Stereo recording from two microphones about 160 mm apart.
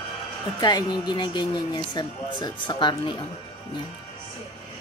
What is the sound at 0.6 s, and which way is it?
Speech, 25° left (ahead or behind).